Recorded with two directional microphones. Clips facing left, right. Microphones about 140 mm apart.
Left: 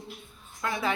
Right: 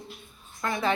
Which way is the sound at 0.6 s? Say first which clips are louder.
Right 2 dB; 5° left (ahead or behind).